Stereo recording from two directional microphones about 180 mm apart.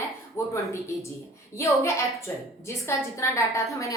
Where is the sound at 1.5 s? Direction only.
15° left (ahead or behind).